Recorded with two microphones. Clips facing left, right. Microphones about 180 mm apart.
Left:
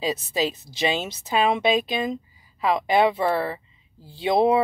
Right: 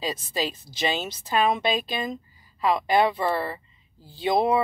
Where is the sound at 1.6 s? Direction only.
25° left (ahead or behind).